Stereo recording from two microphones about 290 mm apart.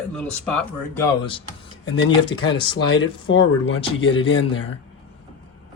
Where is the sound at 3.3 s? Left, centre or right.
Left.